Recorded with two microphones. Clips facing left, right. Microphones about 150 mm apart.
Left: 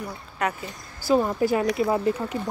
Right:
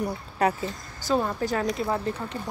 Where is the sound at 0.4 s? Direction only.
35° right (ahead or behind).